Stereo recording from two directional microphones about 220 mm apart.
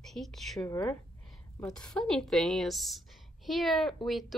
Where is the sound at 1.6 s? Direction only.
5° left (ahead or behind).